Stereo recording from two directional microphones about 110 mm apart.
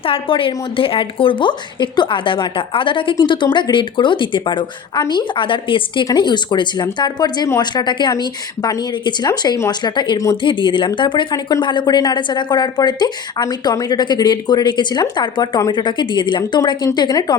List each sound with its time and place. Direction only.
0.0 s speech: 55° left (ahead or behind); by 17.3 s 40° left (ahead or behind)